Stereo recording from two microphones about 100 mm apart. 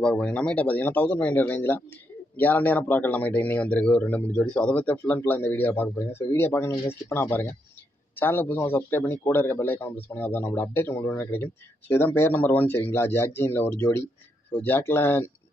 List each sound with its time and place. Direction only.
0.0 s a man's voice: 10° left (ahead or behind)